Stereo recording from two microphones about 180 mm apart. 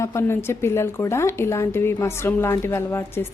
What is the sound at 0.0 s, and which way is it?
Speech, 15° left (ahead or behind).